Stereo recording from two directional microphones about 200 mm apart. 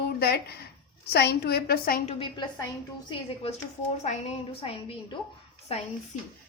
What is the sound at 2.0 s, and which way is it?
A woman's voice, 30° left (ahead or behind).